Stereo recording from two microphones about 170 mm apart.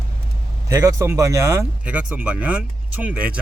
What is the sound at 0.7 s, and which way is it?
Speech, 20° right (ahead or behind).